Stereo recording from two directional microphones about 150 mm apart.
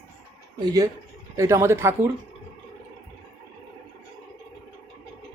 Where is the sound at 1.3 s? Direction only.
20° right (ahead or behind).